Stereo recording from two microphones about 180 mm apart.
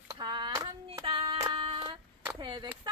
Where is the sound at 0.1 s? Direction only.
25° right (ahead or behind).